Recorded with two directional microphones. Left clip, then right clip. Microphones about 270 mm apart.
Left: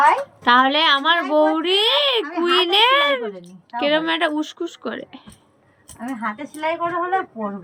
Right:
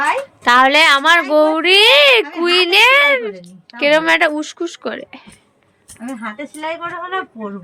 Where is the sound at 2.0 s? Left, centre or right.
Centre.